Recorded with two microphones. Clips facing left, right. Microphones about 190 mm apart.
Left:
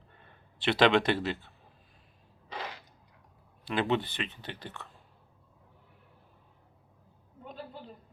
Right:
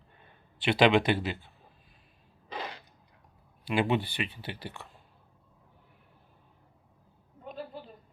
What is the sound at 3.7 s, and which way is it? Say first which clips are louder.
Speech: right 1 dB; 10° right (ahead or behind).